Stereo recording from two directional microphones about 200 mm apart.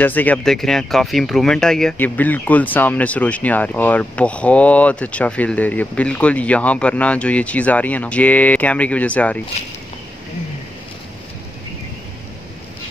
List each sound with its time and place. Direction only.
0.0 s speech: 10° left (ahead or behind)